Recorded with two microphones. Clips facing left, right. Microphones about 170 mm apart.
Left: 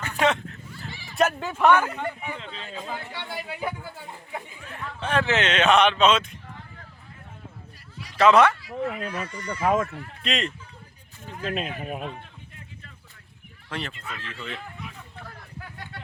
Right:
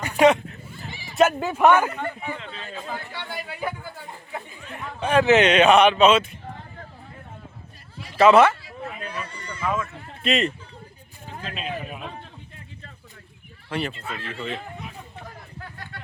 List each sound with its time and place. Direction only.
0.0 s a sound: 15° right (ahead or behind)
1.1 s speech: 5° right (ahead or behind)
1.9 s speech: 15° left (ahead or behind)
4.7 s speech: 15° right (ahead or behind)
8.1 s speech: 5° right (ahead or behind)
9.0 s speech: 30° right (ahead or behind)
9.5 s speech: 50° left (ahead or behind)
10.2 s a man's voice: 5° right (ahead or behind)
11.4 s speech: 55° left (ahead or behind)
13.7 s speech: 5° right (ahead or behind)
13.9 s a sound: 30° right (ahead or behind)
15.6 s a sound: 20° left (ahead or behind)